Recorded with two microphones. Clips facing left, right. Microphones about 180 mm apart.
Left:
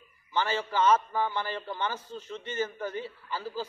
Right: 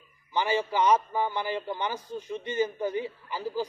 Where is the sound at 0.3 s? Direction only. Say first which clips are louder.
Right 3 dB; 15° right (ahead or behind).